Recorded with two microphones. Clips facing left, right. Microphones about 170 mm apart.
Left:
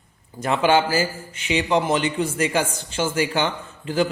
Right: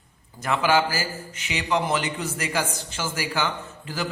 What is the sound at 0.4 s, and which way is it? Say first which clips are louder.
A man's voice: left 3 dB; 25° left (ahead or behind).